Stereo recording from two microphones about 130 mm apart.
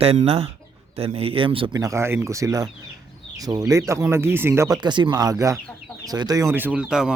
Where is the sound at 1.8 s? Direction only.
20° right (ahead or behind).